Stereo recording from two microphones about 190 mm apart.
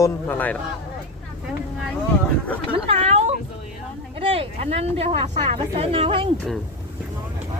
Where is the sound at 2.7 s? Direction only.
30° right (ahead or behind).